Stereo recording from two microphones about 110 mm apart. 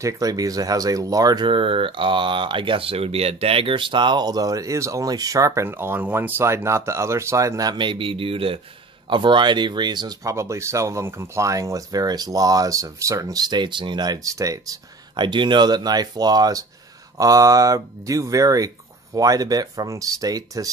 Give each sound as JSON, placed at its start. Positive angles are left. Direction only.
{"t": 0.0, "sound": "speech", "side_deg": -35}
{"t": 10.3, "sound": "speech", "side_deg": -25}
{"t": 15.1, "sound": "speech", "side_deg": -45}